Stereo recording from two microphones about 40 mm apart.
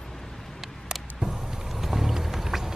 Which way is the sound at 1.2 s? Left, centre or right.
Centre.